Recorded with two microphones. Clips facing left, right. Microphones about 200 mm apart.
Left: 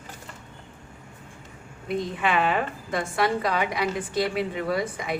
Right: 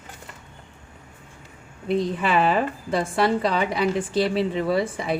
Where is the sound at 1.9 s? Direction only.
35° right (ahead or behind).